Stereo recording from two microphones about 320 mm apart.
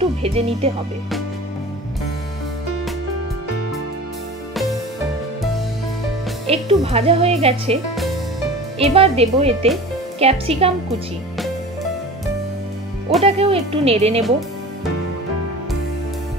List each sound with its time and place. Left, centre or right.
0.0 s speech: centre
6.4 s speech: centre
13.2 s speech: centre